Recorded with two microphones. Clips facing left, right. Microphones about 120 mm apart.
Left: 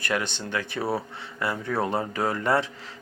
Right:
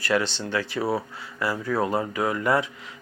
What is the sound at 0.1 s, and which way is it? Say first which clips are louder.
Speech: right 4 dB; 5° left (ahead or behind).